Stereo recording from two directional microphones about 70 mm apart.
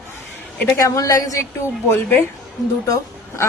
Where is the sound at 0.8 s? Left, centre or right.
Left.